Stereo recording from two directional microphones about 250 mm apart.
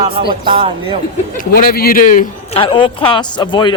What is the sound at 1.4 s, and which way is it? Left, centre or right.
A man's voice, left.